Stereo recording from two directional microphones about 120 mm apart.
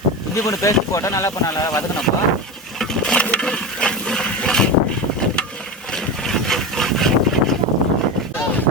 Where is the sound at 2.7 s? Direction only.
5° left (ahead or behind).